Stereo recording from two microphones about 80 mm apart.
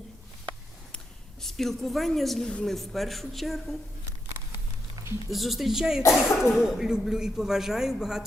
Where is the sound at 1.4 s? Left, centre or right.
Centre.